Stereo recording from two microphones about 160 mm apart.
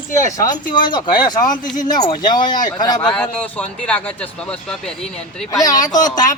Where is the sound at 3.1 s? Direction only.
5° left (ahead or behind).